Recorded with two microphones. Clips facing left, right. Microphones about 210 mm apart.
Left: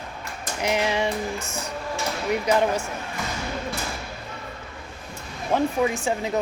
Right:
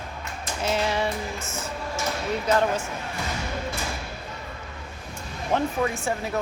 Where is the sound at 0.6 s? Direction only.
15° left (ahead or behind).